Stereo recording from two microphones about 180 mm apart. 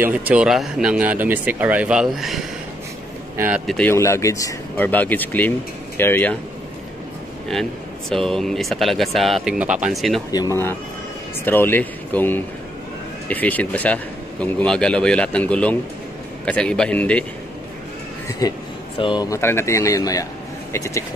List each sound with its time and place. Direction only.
0.0 s speech: 10° right (ahead or behind)
3.9 s speech: 15° left (ahead or behind)
8.1 s speech: 5° left (ahead or behind)
10.3 s speech: 20° left (ahead or behind)
18.4 s speech: 20° left (ahead or behind)